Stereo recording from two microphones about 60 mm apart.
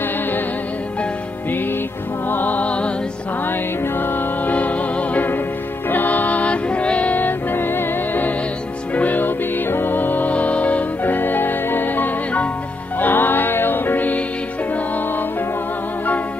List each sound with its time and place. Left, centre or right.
2.2 s music: left
4.0 s music: left